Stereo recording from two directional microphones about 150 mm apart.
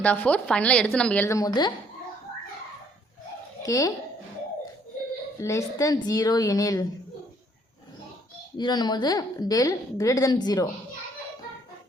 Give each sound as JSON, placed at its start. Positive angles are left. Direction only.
{"t": 0.0, "sound": "a woman's voice", "side_deg": 10}
{"t": 3.6, "sound": "a woman's voice", "side_deg": 20}
{"t": 5.4, "sound": "a woman's voice", "side_deg": 20}
{"t": 8.5, "sound": "a woman's voice", "side_deg": 30}